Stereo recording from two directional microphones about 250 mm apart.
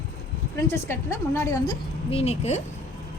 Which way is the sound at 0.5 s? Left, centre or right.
Centre.